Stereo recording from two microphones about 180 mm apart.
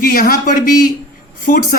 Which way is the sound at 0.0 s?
50° left (ahead or behind).